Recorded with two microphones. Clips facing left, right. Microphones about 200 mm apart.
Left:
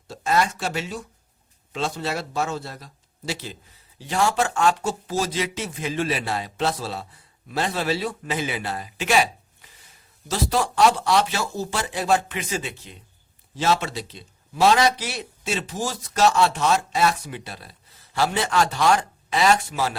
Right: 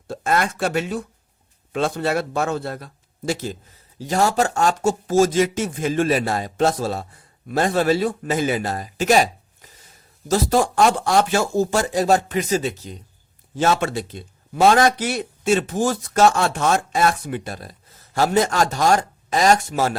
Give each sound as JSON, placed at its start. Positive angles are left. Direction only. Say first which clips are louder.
{"t": 0.1, "sound": "a man's voice", "louder": "right 1 dB", "side_deg": -55}
{"t": 13.6, "sound": "a man's voice", "louder": "right 3 dB", "side_deg": -50}